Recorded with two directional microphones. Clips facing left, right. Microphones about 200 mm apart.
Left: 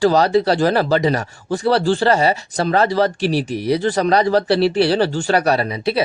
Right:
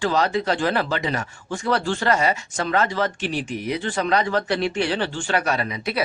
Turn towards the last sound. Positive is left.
turn(degrees=30)  # may be behind; listen again after turning